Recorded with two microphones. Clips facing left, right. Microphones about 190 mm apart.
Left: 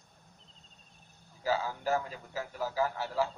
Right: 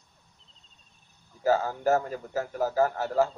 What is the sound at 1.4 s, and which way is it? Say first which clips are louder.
A man's voice: right 7 dB; 50° right (ahead or behind).